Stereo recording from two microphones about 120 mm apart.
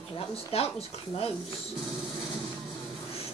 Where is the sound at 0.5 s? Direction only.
55° left (ahead or behind).